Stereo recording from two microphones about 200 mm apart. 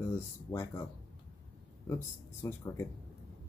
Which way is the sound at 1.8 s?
15° left (ahead or behind).